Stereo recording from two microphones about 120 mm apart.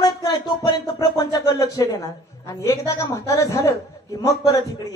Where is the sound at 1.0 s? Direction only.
30° left (ahead or behind).